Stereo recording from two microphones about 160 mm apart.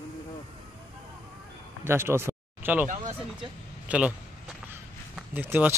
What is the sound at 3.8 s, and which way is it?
Speech, 10° right (ahead or behind).